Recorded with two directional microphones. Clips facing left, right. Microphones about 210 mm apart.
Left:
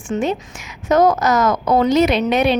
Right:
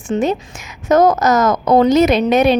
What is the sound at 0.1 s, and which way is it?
A woman's voice, 40° right (ahead or behind).